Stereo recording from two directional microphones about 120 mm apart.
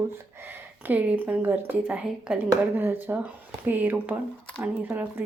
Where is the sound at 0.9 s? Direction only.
15° right (ahead or behind).